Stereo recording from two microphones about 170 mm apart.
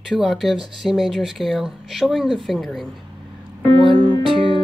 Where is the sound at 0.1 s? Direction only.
Centre (ahead or behind).